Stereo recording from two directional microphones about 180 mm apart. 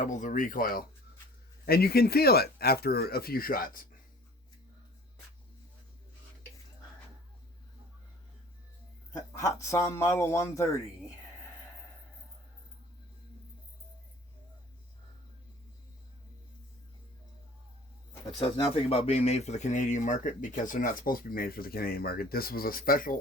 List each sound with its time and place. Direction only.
0.0 s speech: 45° left (ahead or behind)
9.4 s a man's voice: 15° left (ahead or behind)
18.3 s speech: 30° left (ahead or behind); by 23.1 s 55° left (ahead or behind)